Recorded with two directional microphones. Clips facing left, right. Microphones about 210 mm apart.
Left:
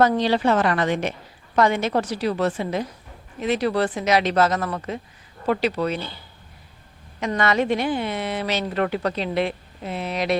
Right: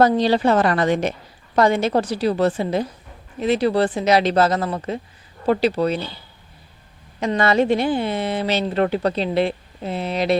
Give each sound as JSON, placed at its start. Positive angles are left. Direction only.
{"t": 0.2, "sound": "speech", "side_deg": -35}
{"t": 7.2, "sound": "speech", "side_deg": -30}